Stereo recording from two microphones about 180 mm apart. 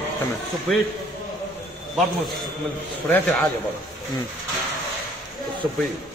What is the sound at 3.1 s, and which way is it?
Speech, centre (ahead or behind).